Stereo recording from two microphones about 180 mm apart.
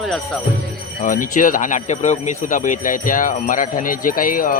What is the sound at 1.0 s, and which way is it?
Speech, 50° left (ahead or behind).